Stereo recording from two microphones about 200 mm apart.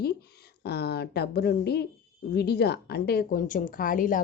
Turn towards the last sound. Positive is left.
turn(degrees=40)  # may be behind; listen again after turning